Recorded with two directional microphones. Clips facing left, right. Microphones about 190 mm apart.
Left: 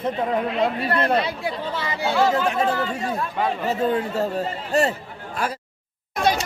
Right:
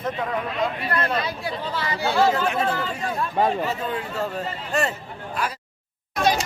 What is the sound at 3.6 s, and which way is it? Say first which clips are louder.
Speech: left 5 dB; 40° left (ahead or behind).